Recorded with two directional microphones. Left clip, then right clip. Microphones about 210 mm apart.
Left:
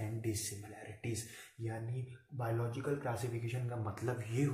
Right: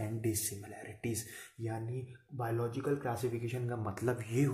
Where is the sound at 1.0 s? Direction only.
50° right (ahead or behind).